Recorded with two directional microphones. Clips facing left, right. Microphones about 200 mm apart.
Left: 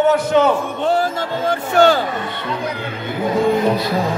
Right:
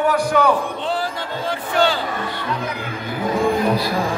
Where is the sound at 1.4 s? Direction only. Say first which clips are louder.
Left 6 dB; 45° left (ahead or behind).